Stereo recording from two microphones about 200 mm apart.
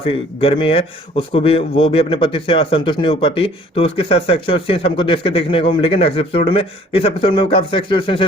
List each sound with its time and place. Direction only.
0.0 s a man's voice: 25° left (ahead or behind)